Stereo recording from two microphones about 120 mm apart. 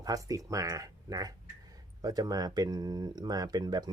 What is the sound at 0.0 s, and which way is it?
Speech, 30° right (ahead or behind).